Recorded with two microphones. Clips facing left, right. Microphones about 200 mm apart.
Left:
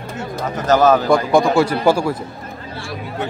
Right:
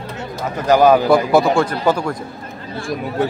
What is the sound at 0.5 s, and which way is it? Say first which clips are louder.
Speech: right 2 dB; 10° right (ahead or behind).